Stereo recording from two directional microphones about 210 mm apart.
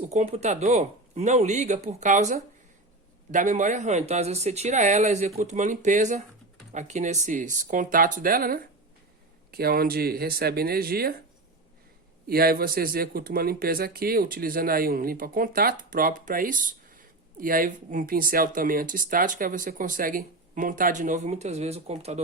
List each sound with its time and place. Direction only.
0.1 s speech: 30° right (ahead or behind)
12.3 s speech: 45° right (ahead or behind); by 22.2 s 30° right (ahead or behind)